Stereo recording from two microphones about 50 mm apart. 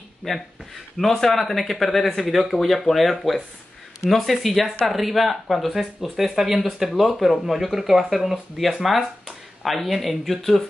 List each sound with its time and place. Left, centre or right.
0.2 s speech: centre